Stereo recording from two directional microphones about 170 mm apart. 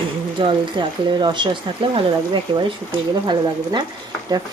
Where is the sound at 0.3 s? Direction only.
30° right (ahead or behind).